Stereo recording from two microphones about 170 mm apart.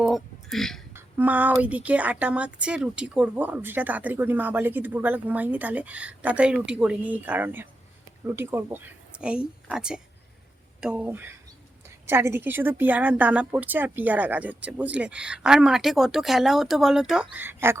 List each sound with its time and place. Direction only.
0.0 s burping: centre (ahead or behind)
0.9 s speech: 10° right (ahead or behind)